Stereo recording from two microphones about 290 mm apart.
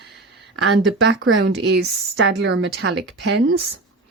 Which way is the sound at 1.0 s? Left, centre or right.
Right.